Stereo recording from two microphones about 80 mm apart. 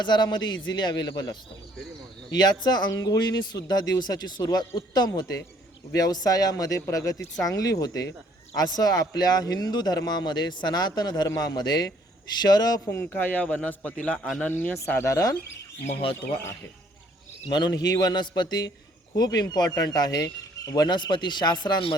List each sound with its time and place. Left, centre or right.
0.0 s a man's voice: left
2.9 s a man's voice: left
12.9 s a man's voice: left
15.0 s speech: left
17.5 s a man's voice: left